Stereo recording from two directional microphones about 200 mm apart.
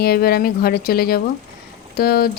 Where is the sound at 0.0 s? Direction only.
50° left (ahead or behind).